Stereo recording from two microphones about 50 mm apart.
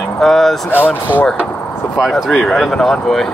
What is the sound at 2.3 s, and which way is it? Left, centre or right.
Speech, centre.